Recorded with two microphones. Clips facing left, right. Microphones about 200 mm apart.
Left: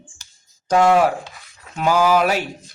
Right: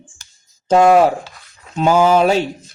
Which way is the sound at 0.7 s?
25° right (ahead or behind).